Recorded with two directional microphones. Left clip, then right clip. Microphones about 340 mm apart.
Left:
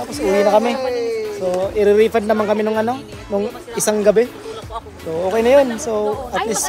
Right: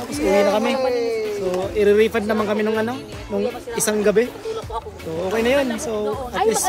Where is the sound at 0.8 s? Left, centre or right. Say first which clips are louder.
Even; centre.